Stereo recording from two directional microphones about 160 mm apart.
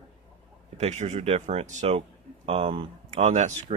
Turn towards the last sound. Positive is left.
turn(degrees=-45)  # may be behind; listen again after turning